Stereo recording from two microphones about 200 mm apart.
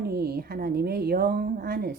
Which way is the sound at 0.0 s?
50° right (ahead or behind).